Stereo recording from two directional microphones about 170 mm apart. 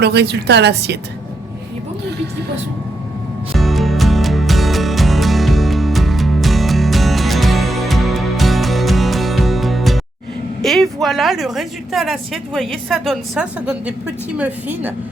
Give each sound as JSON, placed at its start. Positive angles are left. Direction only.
{"t": 0.0, "sound": "a woman's voice", "side_deg": -80}
{"t": 3.5, "sound": "music", "side_deg": 0}
{"t": 10.6, "sound": "a woman's voice", "side_deg": 0}